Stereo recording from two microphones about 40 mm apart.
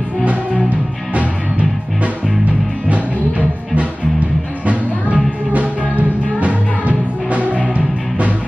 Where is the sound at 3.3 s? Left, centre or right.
Right.